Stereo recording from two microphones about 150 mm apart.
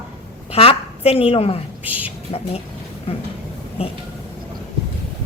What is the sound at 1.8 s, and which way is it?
Speech, 10° right (ahead or behind).